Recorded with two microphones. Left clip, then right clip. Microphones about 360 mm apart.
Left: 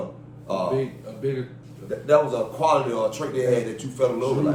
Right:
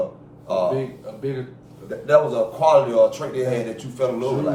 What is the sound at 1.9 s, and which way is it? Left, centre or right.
Speech, centre.